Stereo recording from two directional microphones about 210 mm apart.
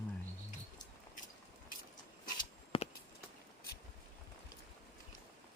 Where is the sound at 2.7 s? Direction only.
25° left (ahead or behind).